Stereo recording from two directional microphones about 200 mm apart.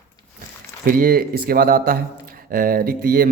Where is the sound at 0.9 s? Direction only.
45° right (ahead or behind).